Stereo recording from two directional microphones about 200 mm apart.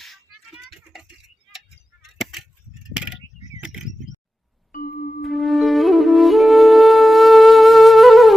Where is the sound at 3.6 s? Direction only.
Centre (ahead or behind).